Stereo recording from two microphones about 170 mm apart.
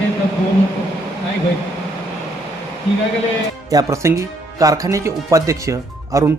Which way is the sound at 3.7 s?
20° right (ahead or behind).